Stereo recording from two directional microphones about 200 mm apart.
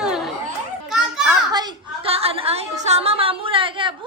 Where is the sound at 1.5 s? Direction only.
20° right (ahead or behind).